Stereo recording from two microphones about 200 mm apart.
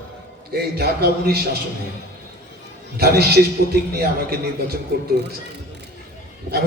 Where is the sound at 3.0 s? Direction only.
50° right (ahead or behind).